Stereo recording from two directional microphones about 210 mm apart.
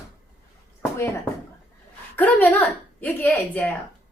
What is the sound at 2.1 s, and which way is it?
A woman's voice, 10° left (ahead or behind).